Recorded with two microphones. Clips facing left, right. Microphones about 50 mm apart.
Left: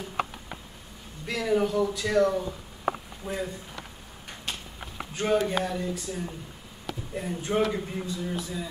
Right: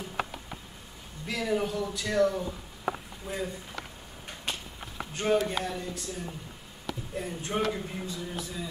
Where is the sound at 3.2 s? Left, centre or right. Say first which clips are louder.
Left 3 dB; left.